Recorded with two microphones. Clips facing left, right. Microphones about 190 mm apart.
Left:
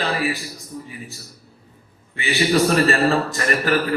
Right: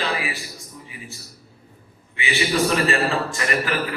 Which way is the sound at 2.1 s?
40° left (ahead or behind).